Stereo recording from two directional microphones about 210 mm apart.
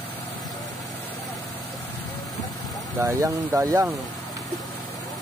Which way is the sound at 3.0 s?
15° right (ahead or behind).